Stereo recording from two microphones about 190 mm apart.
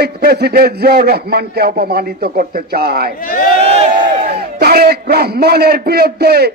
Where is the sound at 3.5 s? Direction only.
30° right (ahead or behind).